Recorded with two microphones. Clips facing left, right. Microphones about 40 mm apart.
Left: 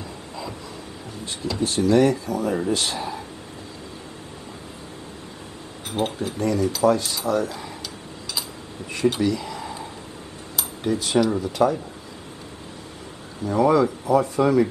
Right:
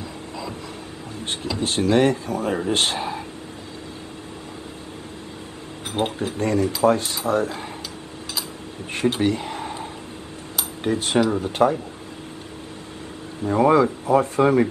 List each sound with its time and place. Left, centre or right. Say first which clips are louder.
1.2 s a sound: right 1 dB; right
1.6 s speech: left 1 dB; right
5.9 s speech: right 1 dB; right
9.2 s a sound: right 1 dB; right
10.8 s speech: even; right
13.4 s speech: right 2 dB; right